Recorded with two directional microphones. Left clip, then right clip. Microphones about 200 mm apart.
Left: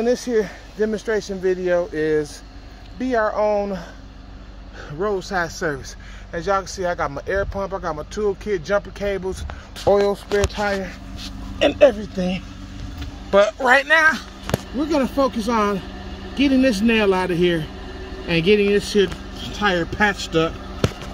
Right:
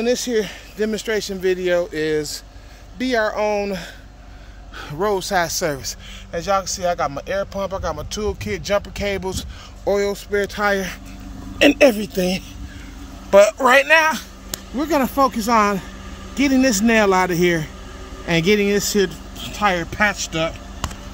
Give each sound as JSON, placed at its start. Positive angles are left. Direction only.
{"t": 0.0, "sound": "speech", "side_deg": -10}
{"t": 3.3, "sound": "speech", "side_deg": -40}
{"t": 4.8, "sound": "speech", "side_deg": -35}
{"t": 6.3, "sound": "speech", "side_deg": 0}
{"t": 9.8, "sound": "speech", "side_deg": 0}
{"t": 10.6, "sound": "speech", "side_deg": -45}
{"t": 11.5, "sound": "speech", "side_deg": -90}
{"t": 13.3, "sound": "speech", "side_deg": -40}
{"t": 14.8, "sound": "speech", "side_deg": -15}
{"t": 19.4, "sound": "speech", "side_deg": -5}